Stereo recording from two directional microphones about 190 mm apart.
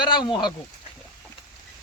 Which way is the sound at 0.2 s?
25° left (ahead or behind).